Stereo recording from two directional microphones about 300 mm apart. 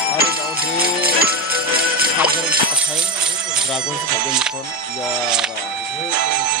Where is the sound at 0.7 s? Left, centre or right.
Right.